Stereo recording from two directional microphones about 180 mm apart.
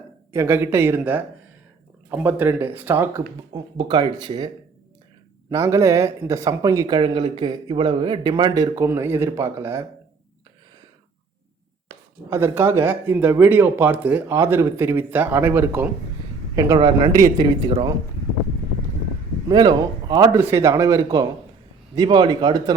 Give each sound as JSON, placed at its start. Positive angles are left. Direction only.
{"t": 0.3, "sound": "speech", "side_deg": -10}
{"t": 12.3, "sound": "speech", "side_deg": -15}
{"t": 19.5, "sound": "speech", "side_deg": -20}